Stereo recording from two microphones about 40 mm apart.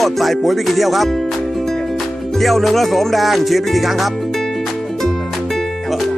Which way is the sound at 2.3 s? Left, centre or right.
Centre.